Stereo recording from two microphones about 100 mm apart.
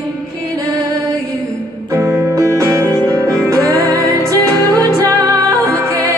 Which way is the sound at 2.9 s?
25° left (ahead or behind).